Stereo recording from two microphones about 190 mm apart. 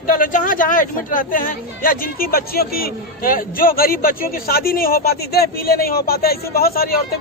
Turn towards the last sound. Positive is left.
turn(degrees=50)  # may be behind; listen again after turning